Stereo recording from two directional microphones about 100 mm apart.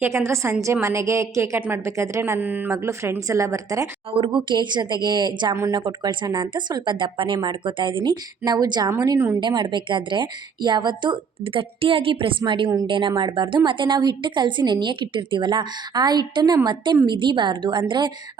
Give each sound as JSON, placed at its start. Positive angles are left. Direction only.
{"t": 0.0, "sound": "a woman's voice", "side_deg": -30}
{"t": 2.4, "sound": "speech", "side_deg": -15}
{"t": 2.6, "sound": "speech", "side_deg": -30}
{"t": 4.1, "sound": "speech", "side_deg": -55}
{"t": 9.0, "sound": "a woman's voice", "side_deg": -35}
{"t": 9.4, "sound": "speech", "side_deg": -50}